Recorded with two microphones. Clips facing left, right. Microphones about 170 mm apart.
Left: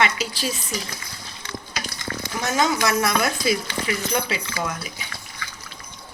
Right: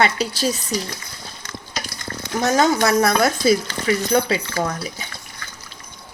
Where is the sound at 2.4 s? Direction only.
40° right (ahead or behind).